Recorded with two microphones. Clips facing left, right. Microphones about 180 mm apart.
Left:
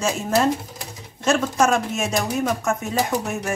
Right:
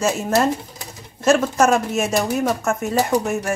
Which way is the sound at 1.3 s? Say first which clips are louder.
Right 3 dB; 5° right (ahead or behind).